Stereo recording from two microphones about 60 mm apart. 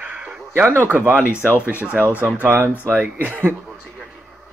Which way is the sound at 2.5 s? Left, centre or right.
Right.